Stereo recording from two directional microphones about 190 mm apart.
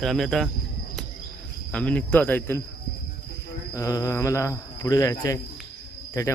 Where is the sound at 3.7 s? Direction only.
20° left (ahead or behind).